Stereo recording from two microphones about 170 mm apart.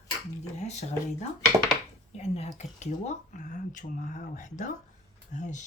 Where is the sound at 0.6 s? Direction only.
40° left (ahead or behind).